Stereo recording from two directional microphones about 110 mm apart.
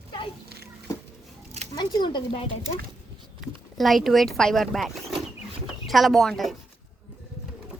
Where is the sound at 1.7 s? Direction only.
40° left (ahead or behind).